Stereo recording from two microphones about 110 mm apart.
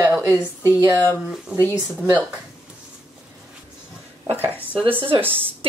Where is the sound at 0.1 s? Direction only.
20° right (ahead or behind).